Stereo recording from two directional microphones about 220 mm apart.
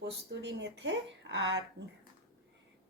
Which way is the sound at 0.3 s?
50° right (ahead or behind).